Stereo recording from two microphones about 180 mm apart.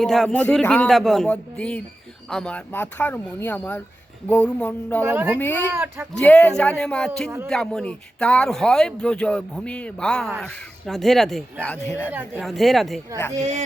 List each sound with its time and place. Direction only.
0.0 s speech: centre (ahead or behind)
5.0 s speech: 10° right (ahead or behind)
5.4 s speech: 10° left (ahead or behind)
5.7 s speech: 10° right (ahead or behind)
6.1 s speech: 5° left (ahead or behind)
12.1 s speech: 10° right (ahead or behind)
12.4 s speech: centre (ahead or behind)
13.3 s speech: 40° right (ahead or behind)